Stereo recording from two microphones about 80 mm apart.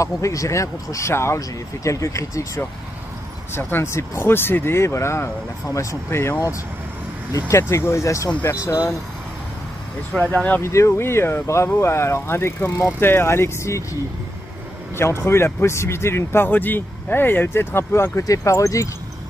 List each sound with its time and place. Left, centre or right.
0.0 s speech: left
7.3 s speech: left
10.1 s speech: centre
10.6 s speech: left
15.0 s speech: left